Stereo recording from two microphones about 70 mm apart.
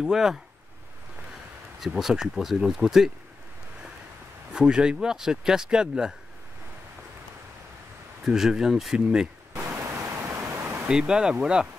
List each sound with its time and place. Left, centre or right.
0.0 s speech: centre
1.8 s speech: centre
4.6 s speech: centre
8.3 s speech: centre
9.7 s pink noise: right
10.9 s speech: centre